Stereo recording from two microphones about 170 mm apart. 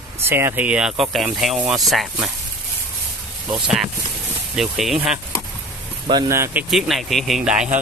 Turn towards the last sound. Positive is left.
turn(degrees=-5)  # may be behind; listen again after turning